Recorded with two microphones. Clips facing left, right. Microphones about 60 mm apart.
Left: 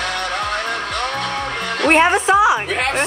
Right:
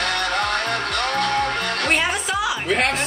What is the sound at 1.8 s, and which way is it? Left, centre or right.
Music, left.